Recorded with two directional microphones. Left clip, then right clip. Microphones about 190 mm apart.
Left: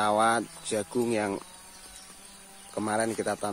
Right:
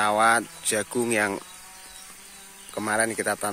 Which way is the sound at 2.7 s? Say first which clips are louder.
Right 3 dB; 5° left (ahead or behind).